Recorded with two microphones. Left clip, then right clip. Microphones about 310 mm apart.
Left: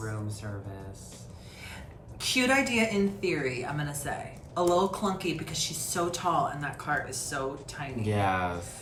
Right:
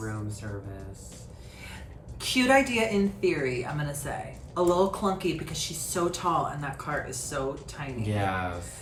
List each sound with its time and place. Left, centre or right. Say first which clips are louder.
2.1 s speech: right 3 dB; centre
8.0 s speech: left 2 dB; centre